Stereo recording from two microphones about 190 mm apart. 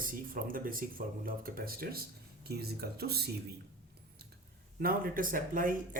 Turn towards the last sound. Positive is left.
turn(degrees=-45)  # may be behind; listen again after turning